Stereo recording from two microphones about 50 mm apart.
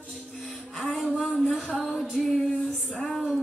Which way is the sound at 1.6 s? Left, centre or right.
Centre.